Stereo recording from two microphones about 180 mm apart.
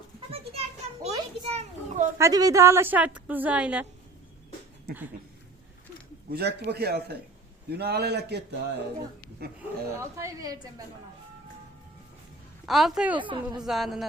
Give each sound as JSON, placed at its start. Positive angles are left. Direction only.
{"t": 0.3, "sound": "a sound", "side_deg": -35}
{"t": 1.5, "sound": "a child's voice", "side_deg": -40}
{"t": 2.1, "sound": "a woman's voice", "side_deg": -20}
{"t": 6.3, "sound": "a man's voice", "side_deg": -65}
{"t": 9.6, "sound": "speech", "side_deg": -15}
{"t": 12.6, "sound": "a woman's voice", "side_deg": 0}
{"t": 13.1, "sound": "speech", "side_deg": -25}
{"t": 13.6, "sound": "a woman's voice", "side_deg": 0}